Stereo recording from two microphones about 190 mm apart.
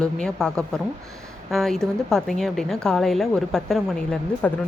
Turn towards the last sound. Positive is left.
turn(degrees=5)  # may be behind; listen again after turning